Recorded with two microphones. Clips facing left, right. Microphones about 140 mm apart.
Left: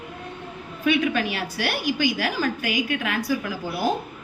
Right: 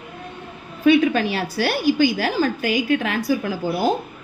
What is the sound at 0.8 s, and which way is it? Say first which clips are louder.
A woman's voice: right 6 dB; 35° right (ahead or behind).